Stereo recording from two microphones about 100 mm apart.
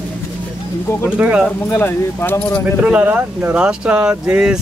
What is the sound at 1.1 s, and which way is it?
Speech, 10° right (ahead or behind).